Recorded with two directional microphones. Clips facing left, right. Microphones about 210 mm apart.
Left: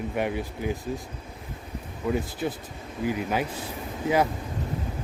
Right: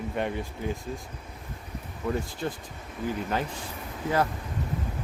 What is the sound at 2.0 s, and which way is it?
Speech, 5° left (ahead or behind).